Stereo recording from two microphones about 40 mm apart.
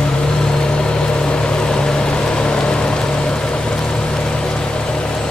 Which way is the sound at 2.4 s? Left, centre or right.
Left.